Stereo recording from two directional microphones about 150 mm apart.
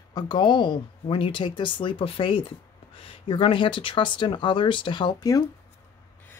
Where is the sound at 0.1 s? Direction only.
30° left (ahead or behind).